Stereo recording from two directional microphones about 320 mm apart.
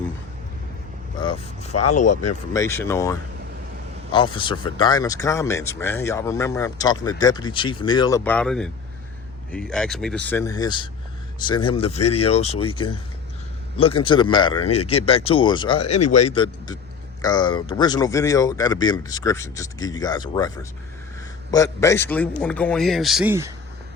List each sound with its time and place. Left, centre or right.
1.2 s speech: centre
1.7 s speech: left
2.5 s a man's voice: centre
13.7 s speech: centre
16.0 s speech: left
16.2 s a man's voice: centre